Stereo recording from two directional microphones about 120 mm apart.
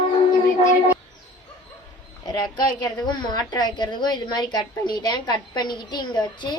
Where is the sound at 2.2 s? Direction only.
35° left (ahead or behind).